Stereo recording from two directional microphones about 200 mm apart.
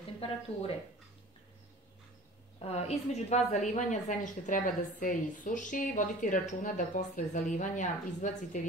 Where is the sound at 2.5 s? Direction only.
30° left (ahead or behind).